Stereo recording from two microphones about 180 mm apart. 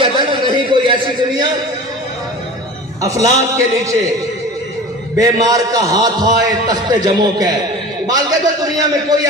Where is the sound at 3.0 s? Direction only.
20° right (ahead or behind).